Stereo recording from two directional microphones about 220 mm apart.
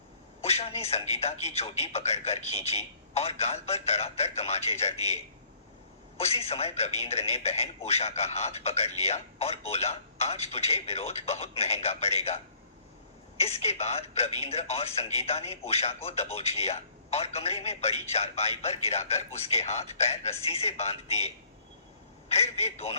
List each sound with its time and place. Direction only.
0.4 s speech: 30° left (ahead or behind)